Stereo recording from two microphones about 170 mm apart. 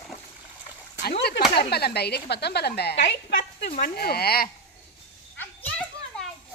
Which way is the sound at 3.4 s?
45° left (ahead or behind).